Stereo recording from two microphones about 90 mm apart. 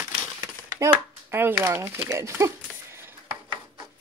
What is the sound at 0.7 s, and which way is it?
A child's voice, 30° right (ahead or behind).